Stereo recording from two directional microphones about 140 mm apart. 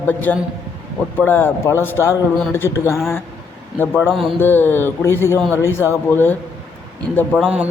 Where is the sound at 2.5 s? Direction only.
20° left (ahead or behind).